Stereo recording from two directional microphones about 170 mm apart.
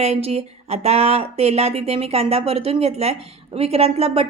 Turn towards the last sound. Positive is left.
turn(degrees=-35)  # may be behind; listen again after turning